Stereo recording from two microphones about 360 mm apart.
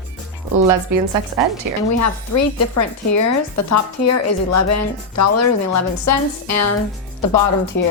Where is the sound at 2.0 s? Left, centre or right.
Left.